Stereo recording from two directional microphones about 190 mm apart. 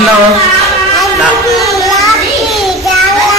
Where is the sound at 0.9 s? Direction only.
Centre (ahead or behind).